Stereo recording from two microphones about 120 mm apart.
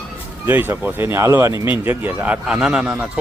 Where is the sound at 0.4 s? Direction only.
15° right (ahead or behind).